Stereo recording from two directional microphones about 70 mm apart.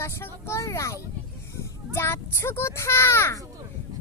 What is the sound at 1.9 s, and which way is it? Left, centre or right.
Speech, left.